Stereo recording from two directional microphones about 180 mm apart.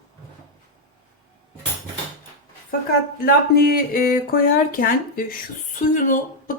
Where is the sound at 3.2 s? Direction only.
55° left (ahead or behind).